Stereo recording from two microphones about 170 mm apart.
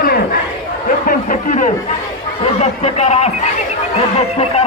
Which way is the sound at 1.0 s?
50° left (ahead or behind).